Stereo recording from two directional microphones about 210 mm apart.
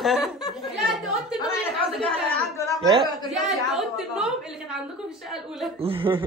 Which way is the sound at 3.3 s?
Centre (ahead or behind).